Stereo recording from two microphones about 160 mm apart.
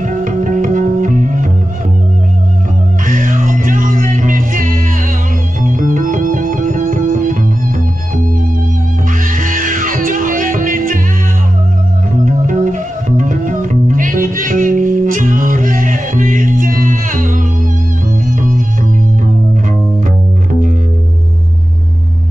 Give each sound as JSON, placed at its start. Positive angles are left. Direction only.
{"t": 0.0, "sound": "music", "side_deg": -55}
{"t": 3.1, "sound": "music", "side_deg": -55}
{"t": 9.2, "sound": "music", "side_deg": -55}
{"t": 12.4, "sound": "music", "side_deg": -55}